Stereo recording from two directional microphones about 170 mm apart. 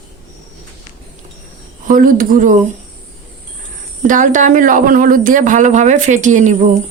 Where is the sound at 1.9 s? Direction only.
55° right (ahead or behind).